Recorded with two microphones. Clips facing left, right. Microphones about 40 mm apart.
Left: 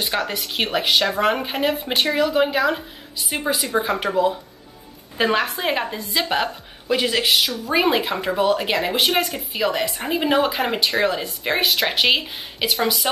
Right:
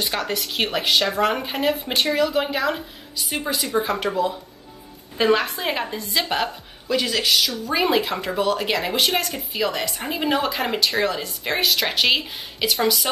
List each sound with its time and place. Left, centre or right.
0.4 s speech: centre
3.2 s a woman's voice: centre
6.9 s a woman's voice: left